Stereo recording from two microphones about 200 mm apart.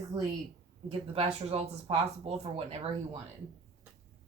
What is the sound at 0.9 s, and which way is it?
Speech, 30° right (ahead or behind).